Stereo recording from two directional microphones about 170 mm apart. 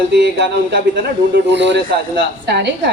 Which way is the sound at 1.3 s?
90° right.